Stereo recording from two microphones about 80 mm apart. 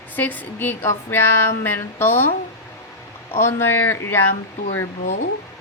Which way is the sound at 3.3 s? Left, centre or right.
Left.